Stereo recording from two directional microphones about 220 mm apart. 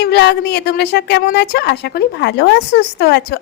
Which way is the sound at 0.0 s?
50° left (ahead or behind).